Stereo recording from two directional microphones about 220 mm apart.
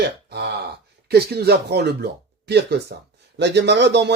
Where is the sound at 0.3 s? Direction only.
50° right (ahead or behind).